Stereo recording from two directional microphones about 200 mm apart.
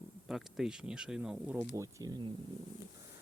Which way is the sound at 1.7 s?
15° right (ahead or behind).